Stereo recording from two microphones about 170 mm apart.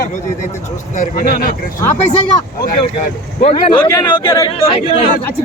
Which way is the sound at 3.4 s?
35° left (ahead or behind).